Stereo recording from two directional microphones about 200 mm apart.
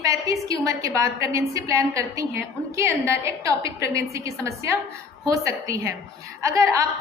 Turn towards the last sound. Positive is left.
turn(degrees=-15)  # may be behind; listen again after turning